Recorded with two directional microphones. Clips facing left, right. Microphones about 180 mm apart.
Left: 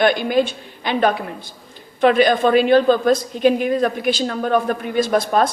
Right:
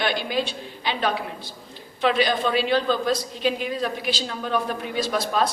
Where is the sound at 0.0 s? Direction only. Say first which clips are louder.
Left 9 dB; 50° left (ahead or behind).